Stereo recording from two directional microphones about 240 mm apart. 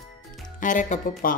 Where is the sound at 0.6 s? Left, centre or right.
Left.